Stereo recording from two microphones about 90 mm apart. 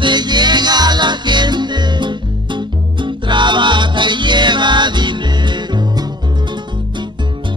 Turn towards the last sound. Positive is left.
turn(degrees=-50)  # may be behind; listen again after turning